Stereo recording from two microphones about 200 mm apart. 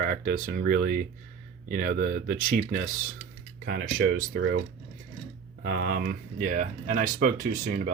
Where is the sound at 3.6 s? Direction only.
75° right (ahead or behind).